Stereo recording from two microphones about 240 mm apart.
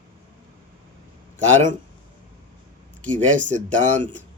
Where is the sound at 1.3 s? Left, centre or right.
Right.